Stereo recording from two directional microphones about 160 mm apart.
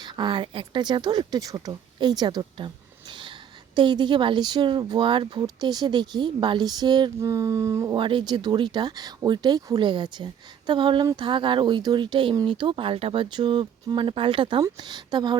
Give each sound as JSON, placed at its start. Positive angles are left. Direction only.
{"t": 0.0, "sound": "speech", "side_deg": -30}
{"t": 3.1, "sound": "a sound", "side_deg": -30}
{"t": 3.8, "sound": "speech", "side_deg": -30}
{"t": 7.9, "sound": "speech", "side_deg": -30}